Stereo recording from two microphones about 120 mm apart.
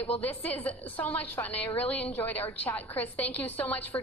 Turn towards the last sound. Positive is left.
turn(degrees=15)  # may be behind; listen again after turning